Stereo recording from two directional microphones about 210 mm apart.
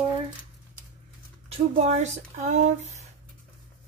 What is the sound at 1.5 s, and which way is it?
Speech, 30° right (ahead or behind).